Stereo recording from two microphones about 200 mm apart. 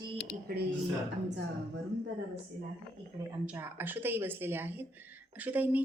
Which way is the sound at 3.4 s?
10° right (ahead or behind).